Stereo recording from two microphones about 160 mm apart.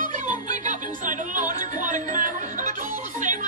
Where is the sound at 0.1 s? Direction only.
55° right (ahead or behind).